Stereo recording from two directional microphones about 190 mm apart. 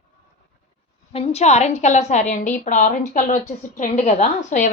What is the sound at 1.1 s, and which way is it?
A woman's voice, 30° left (ahead or behind).